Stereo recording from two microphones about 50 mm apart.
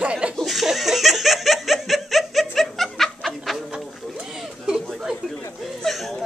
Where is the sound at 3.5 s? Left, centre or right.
Centre.